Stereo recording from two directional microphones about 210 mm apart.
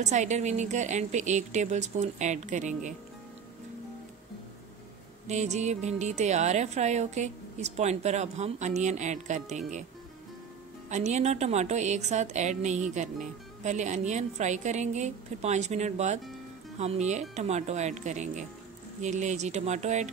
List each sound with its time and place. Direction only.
0.0 s a woman's voice: 35° right (ahead or behind)
5.2 s a woman's voice: 35° right (ahead or behind)
10.9 s a woman's voice: 35° right (ahead or behind)